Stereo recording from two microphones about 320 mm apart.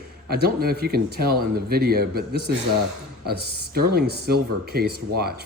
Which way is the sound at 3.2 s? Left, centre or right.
Right.